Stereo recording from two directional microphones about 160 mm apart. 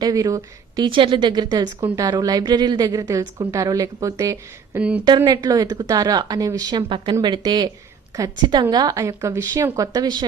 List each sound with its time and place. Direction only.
0.0 s a woman's voice: 20° right (ahead or behind)
0.9 s a woman's voice: 30° right (ahead or behind)
4.8 s a woman's voice: 10° right (ahead or behind)
5.0 s a woman's voice: 25° right (ahead or behind)